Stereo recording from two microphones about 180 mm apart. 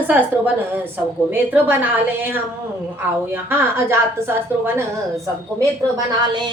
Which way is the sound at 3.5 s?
15° right (ahead or behind).